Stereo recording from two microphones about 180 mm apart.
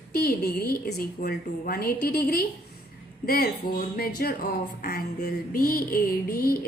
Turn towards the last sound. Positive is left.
turn(degrees=55)  # may be behind; listen again after turning